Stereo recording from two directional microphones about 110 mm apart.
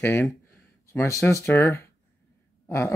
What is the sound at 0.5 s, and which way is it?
Speech, 20° left (ahead or behind).